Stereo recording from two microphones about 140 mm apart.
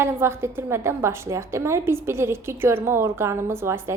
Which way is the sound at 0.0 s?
15° right (ahead or behind).